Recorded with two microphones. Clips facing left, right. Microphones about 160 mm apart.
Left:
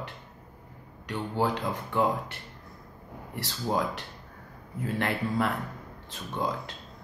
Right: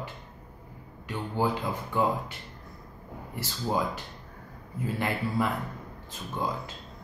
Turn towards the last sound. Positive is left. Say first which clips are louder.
# left 1 dB
turn(degrees=0)  # may be behind; listen again after turning